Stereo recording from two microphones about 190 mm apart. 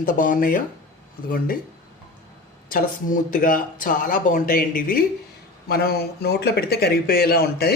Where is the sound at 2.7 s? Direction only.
45° left (ahead or behind).